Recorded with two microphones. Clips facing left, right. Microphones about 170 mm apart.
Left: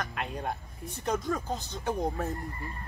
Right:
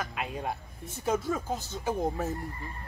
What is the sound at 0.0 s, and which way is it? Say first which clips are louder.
Speech: even; 5° right (ahead or behind).